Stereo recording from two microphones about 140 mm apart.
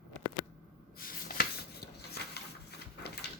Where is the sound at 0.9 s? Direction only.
90° left.